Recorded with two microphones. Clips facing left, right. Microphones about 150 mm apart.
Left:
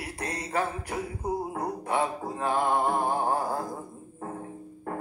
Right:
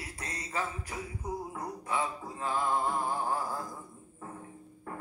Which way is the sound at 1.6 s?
65° left (ahead or behind).